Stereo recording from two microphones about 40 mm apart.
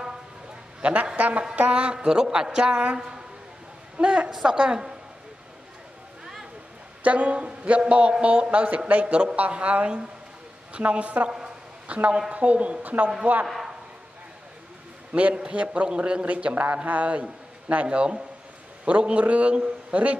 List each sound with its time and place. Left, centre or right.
1.1 s a man's voice: right
2.0 s a man's voice: centre
7.0 s a man's voice: right
9.0 s a man's voice: right
15.1 s a man's voice: right